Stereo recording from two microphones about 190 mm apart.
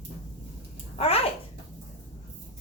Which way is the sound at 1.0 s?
30° left (ahead or behind).